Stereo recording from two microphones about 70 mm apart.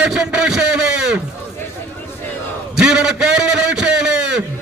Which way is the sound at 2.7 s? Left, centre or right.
Centre.